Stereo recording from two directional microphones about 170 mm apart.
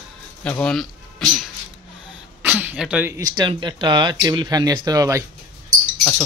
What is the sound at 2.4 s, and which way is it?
Speech, 10° right (ahead or behind).